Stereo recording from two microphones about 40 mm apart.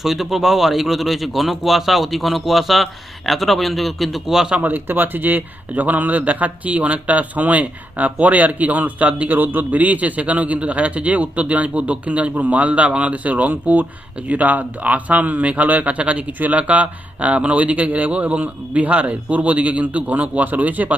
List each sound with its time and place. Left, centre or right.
0.0 s speech: centre
4.6 s speech: right